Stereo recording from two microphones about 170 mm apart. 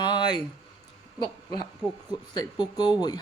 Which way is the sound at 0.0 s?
25° left (ahead or behind).